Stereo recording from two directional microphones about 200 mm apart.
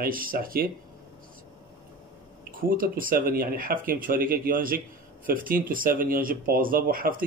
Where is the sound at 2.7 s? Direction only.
45° right (ahead or behind).